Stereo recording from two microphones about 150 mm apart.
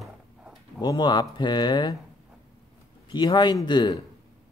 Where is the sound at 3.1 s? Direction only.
30° left (ahead or behind).